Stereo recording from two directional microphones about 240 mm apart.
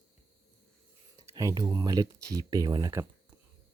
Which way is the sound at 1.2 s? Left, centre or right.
Centre.